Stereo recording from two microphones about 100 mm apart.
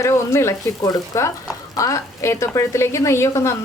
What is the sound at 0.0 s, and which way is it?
A woman's voice, 30° left (ahead or behind).